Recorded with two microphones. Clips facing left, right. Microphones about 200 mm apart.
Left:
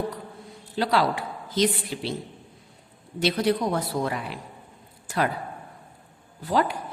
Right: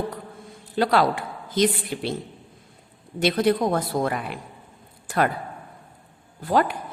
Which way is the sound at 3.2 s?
55° right (ahead or behind).